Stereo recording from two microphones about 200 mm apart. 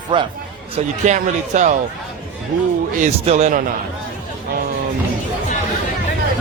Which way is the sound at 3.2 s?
35° right (ahead or behind).